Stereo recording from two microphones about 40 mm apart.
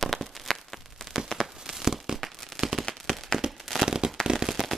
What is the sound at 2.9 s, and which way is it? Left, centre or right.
Firecracker, centre.